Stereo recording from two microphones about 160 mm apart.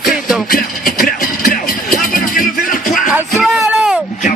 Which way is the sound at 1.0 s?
65° left (ahead or behind).